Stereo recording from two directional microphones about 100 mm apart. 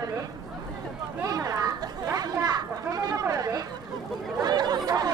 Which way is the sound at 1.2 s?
35° right (ahead or behind).